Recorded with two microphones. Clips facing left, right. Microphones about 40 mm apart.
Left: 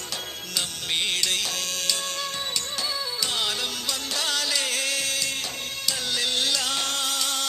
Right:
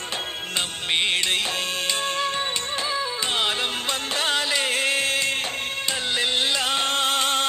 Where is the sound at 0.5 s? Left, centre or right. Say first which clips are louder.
Right 3 dB; right.